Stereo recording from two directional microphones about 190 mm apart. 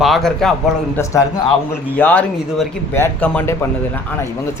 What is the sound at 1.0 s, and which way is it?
Speech, 15° left (ahead or behind).